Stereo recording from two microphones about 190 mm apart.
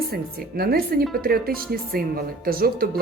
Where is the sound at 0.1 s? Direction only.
55° right (ahead or behind).